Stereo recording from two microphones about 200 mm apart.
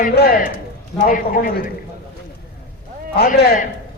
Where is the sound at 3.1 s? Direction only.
50° left (ahead or behind).